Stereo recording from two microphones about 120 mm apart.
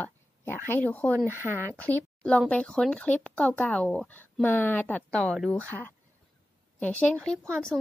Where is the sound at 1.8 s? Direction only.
10° left (ahead or behind).